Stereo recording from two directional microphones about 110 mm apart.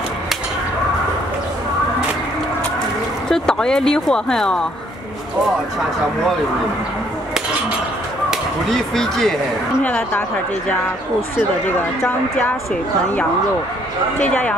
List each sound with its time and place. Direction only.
3.3 s speech: 5° left (ahead or behind)
8.3 s speech: 5° left (ahead or behind)
11.3 s speech: 15° left (ahead or behind)
14.2 s speech: 10° left (ahead or behind)